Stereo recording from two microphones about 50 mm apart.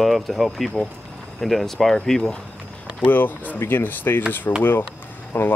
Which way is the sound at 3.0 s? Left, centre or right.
Left.